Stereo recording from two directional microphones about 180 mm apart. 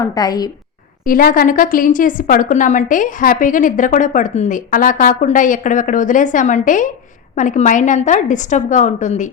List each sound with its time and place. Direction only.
0.0 s a woman's voice: 20° left (ahead or behind)
1.0 s a woman's voice: 50° left (ahead or behind)